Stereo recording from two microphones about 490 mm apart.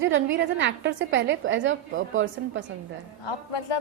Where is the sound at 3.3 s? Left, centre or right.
Left.